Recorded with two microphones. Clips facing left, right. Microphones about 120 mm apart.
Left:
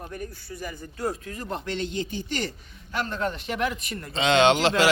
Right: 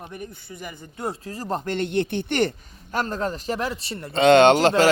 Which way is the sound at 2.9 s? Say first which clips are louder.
Right 3 dB; 40° right (ahead or behind).